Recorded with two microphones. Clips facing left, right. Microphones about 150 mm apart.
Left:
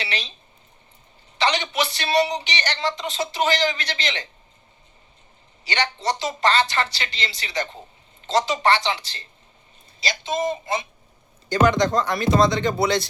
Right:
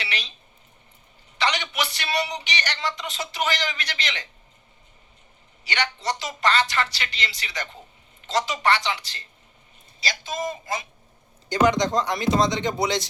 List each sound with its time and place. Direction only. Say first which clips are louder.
0.0 s a sound: left 3 dB; 25° left (ahead or behind)
1.4 s a woman's voice: left 3 dB; 30° left (ahead or behind)
5.6 s speech: left 3 dB; 30° left (ahead or behind)
11.6 s speech: left 1 dB; 20° right (ahead or behind)